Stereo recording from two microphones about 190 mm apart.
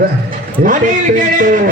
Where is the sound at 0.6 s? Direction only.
45° right (ahead or behind).